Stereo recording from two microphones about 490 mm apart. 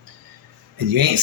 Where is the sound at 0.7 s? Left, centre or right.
Right.